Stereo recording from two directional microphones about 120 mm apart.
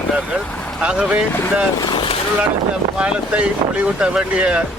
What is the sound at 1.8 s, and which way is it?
Speech, 35° left (ahead or behind).